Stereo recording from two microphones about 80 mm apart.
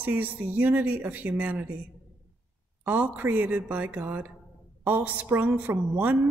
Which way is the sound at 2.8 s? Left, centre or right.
Right.